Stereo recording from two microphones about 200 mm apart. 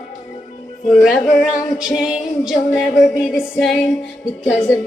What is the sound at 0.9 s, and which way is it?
Music, centre (ahead or behind).